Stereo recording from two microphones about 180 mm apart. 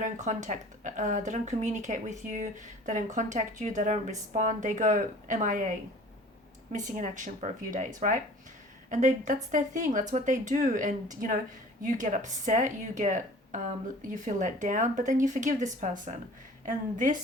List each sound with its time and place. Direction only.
0.0 s speech: 40° right (ahead or behind)
6.7 s speech: 45° right (ahead or behind)